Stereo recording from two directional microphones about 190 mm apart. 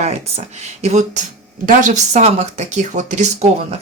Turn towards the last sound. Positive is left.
turn(degrees=-35)  # may be behind; listen again after turning